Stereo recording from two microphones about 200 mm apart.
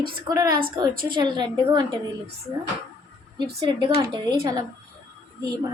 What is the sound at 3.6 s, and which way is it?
A woman's voice, 25° right (ahead or behind).